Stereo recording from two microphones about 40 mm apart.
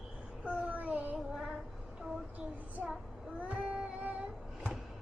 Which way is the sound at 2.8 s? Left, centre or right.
Right.